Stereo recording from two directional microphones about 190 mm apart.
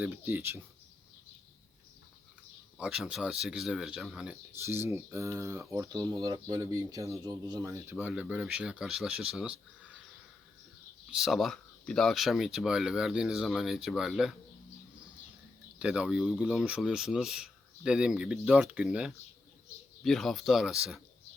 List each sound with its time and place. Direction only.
0.0 s speech: 10° right (ahead or behind)
2.7 s speech: 5° right (ahead or behind)
4.6 s speech: 15° right (ahead or behind)
11.1 s speech: centre (ahead or behind)
15.8 s speech: 5° right (ahead or behind)